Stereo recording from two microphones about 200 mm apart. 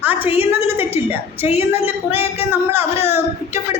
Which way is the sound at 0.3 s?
10° right (ahead or behind).